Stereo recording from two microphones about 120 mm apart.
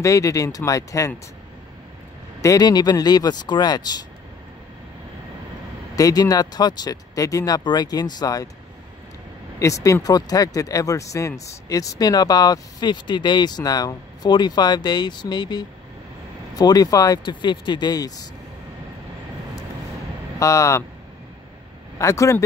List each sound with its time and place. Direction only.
0.0 s speech: 25° left (ahead or behind)
2.4 s speech: 35° left (ahead or behind)
5.9 s speech: 30° left (ahead or behind)
9.6 s speech: 25° left (ahead or behind)
20.3 s speech: 25° left (ahead or behind)
21.9 s speech: 25° left (ahead or behind)